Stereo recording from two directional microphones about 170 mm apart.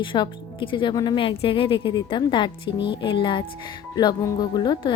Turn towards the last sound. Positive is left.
turn(degrees=25)  # may be behind; listen again after turning